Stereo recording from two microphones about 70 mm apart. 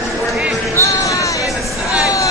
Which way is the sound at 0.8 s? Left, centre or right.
Left.